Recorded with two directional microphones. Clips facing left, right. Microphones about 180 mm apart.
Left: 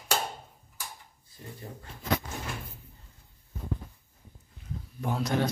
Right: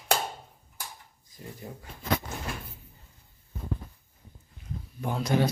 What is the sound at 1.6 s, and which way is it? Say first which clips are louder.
Speech: right 2 dB; 10° right (ahead or behind).